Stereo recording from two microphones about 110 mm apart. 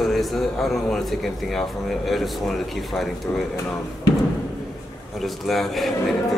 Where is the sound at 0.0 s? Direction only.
Centre (ahead or behind).